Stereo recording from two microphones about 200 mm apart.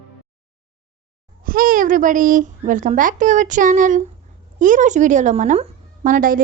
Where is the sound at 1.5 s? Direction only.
45° right (ahead or behind).